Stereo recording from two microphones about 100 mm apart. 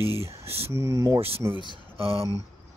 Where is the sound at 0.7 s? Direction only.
30° right (ahead or behind).